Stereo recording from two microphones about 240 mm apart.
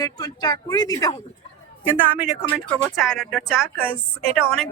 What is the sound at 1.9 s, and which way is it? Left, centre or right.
Speech, centre.